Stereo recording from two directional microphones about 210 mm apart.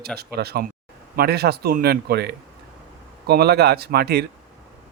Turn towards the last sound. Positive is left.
turn(degrees=-50)  # may be behind; listen again after turning